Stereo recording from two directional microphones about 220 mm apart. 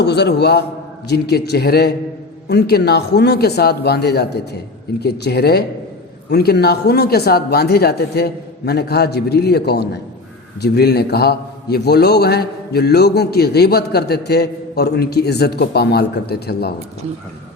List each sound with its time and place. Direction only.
0.0 s a man's voice: 50° left (ahead or behind)